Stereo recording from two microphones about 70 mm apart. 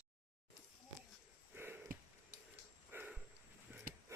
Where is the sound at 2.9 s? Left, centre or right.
Right.